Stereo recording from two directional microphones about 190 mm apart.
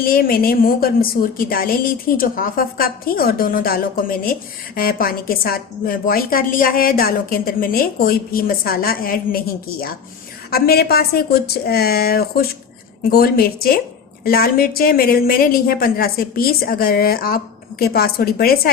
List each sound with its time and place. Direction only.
0.0 s a woman's voice: 50° left (ahead or behind)
10.5 s a woman's voice: 55° left (ahead or behind)